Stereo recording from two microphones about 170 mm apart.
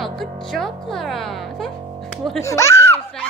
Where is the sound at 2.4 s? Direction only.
15° left (ahead or behind).